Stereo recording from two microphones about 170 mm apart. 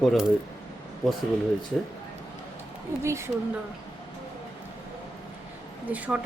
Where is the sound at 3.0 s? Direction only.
15° right (ahead or behind).